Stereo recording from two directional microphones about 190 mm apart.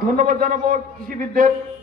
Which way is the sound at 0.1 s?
45° right (ahead or behind).